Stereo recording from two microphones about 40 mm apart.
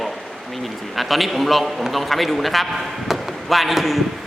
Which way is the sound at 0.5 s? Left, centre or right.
Centre.